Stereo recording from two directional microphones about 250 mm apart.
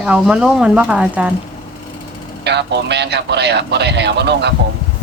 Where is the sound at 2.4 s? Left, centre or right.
Right.